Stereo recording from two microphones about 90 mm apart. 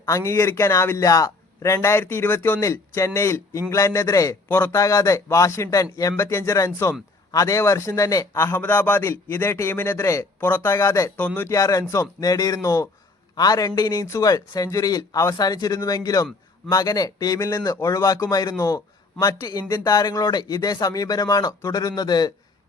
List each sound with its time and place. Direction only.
0.1 s a man's voice: 30° left (ahead or behind)
4.4 s a man's voice: 25° left (ahead or behind); by 19.6 s 50° left (ahead or behind)
19.6 s a man's voice: 35° left (ahead or behind)